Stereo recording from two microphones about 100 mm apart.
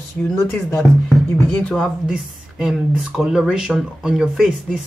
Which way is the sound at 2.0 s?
5° right (ahead or behind).